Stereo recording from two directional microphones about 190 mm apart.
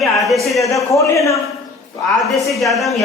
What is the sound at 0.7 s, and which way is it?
Speech, 15° left (ahead or behind).